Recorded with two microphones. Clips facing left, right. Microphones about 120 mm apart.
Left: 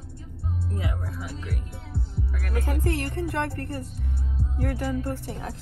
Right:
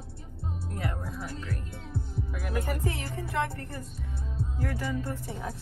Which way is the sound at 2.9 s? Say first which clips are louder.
Left 4 dB; 75° left (ahead or behind).